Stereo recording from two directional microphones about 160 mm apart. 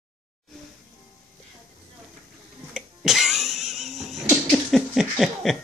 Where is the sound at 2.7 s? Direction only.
Centre (ahead or behind).